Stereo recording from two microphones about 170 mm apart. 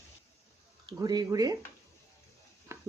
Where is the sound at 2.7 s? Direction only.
15° right (ahead or behind).